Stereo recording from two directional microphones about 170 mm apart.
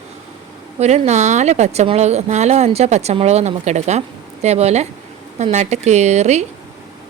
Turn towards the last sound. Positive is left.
turn(degrees=-40)  # may be behind; listen again after turning